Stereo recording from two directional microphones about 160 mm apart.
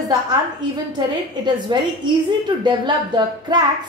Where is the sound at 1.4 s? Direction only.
30° right (ahead or behind).